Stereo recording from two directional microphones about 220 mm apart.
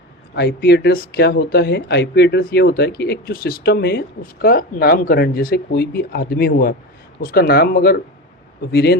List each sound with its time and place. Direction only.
0.3 s speech: 50° left (ahead or behind)